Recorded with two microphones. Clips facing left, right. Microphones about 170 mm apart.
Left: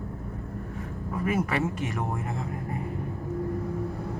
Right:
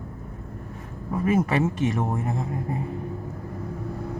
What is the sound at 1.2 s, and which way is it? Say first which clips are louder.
Speech: right 5 dB; 25° right (ahead or behind).